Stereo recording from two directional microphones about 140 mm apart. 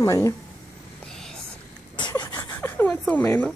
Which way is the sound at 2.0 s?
30° left (ahead or behind).